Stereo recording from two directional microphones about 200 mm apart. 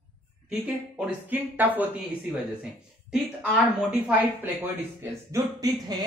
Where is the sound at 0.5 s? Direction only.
5° right (ahead or behind).